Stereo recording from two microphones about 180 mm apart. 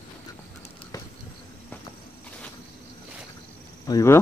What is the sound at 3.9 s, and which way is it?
Speech, 20° left (ahead or behind).